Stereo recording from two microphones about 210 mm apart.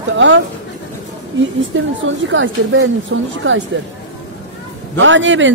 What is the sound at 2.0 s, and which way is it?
A woman's voice, 65° right (ahead or behind).